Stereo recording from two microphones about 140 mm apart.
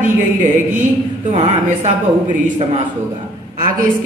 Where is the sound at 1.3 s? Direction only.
55° right (ahead or behind).